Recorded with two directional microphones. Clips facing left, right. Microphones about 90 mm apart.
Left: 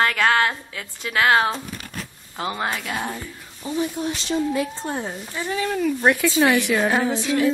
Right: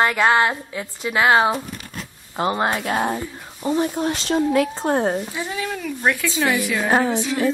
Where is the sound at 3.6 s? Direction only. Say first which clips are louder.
Right 4 dB; 50° right (ahead or behind).